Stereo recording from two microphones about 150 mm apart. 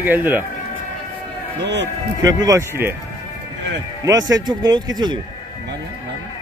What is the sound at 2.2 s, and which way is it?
Speech, 25° right (ahead or behind).